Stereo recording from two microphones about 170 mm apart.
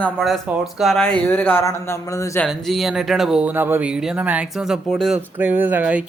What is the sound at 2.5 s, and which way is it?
Speech, centre (ahead or behind).